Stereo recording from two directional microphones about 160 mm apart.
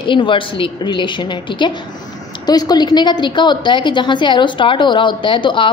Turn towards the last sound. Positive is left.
turn(degrees=30)  # may be behind; listen again after turning